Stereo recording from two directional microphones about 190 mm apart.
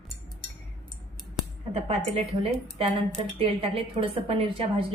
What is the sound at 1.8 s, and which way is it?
Speech, 30° right (ahead or behind).